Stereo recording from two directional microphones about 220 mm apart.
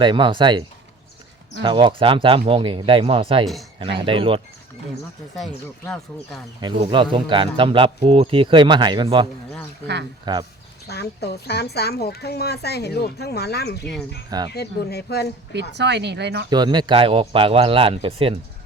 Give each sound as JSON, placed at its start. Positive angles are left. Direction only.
{"t": 0.0, "sound": "speech", "side_deg": -20}
{"t": 1.6, "sound": "speech", "side_deg": -20}
{"t": 5.4, "sound": "speech", "side_deg": 0}
{"t": 6.6, "sound": "speech", "side_deg": -20}
{"t": 9.8, "sound": "speech", "side_deg": -50}
{"t": 10.8, "sound": "a woman's voice", "side_deg": 50}
{"t": 14.3, "sound": "speech", "side_deg": -15}
{"t": 14.5, "sound": "a woman's voice", "side_deg": 45}
{"t": 15.7, "sound": "speech", "side_deg": -50}
{"t": 16.5, "sound": "speech", "side_deg": -20}